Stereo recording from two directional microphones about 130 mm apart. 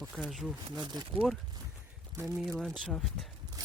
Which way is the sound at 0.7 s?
35° right (ahead or behind).